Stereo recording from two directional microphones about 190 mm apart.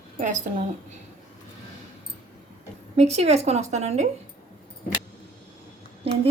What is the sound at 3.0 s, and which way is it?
A woman's voice, 35° right (ahead or behind).